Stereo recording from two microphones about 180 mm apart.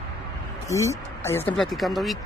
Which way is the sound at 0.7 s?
15° left (ahead or behind).